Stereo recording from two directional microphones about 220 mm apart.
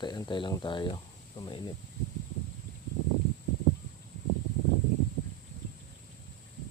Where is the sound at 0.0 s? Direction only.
20° left (ahead or behind).